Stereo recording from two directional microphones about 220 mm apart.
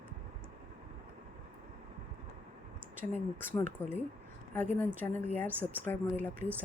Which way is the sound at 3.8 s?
10° left (ahead or behind).